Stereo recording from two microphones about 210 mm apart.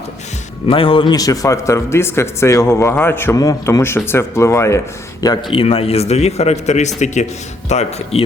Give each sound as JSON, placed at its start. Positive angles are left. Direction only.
{"t": 0.7, "sound": "a man's voice", "side_deg": 25}